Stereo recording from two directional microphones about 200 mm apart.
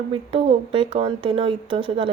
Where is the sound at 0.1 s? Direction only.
30° right (ahead or behind).